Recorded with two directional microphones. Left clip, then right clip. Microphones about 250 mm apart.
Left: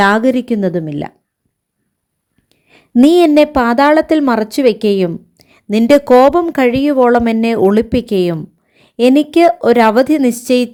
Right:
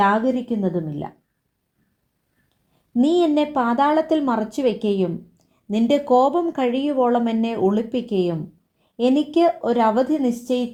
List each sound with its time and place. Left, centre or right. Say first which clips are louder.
0.0 s speech: left 7 dB; left
3.5 s a woman's voice: left 8 dB; left